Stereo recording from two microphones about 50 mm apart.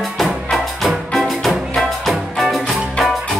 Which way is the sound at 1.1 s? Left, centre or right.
Centre.